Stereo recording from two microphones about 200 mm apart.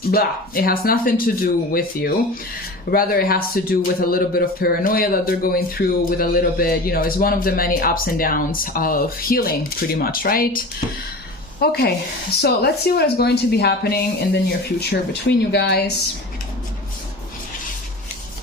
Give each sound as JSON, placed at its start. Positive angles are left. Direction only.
{"t": 0.1, "sound": "speech", "side_deg": 50}
{"t": 11.6, "sound": "speech", "side_deg": 50}